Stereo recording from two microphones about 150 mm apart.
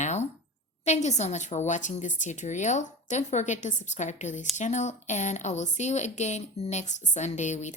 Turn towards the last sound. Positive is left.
turn(degrees=50)  # may be behind; listen again after turning